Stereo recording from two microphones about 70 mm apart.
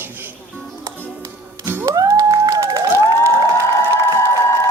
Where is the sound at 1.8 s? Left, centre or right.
Right.